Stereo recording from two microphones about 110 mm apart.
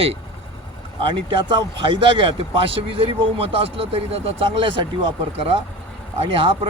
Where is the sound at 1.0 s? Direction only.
45° right (ahead or behind).